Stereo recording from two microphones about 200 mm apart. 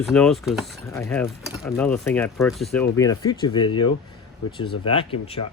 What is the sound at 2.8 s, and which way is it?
Speech, 15° left (ahead or behind).